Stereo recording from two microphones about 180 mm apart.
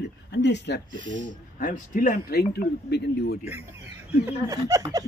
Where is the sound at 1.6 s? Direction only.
45° left (ahead or behind).